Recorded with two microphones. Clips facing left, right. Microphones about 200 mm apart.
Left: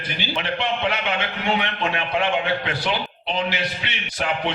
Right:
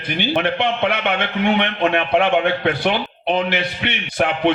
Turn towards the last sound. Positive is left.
turn(degrees=-60)  # may be behind; listen again after turning